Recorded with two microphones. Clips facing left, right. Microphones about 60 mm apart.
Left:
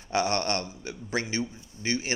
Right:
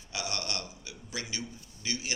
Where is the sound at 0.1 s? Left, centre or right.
Left.